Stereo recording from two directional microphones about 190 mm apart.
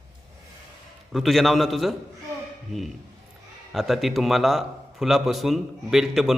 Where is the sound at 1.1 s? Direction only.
Centre (ahead or behind).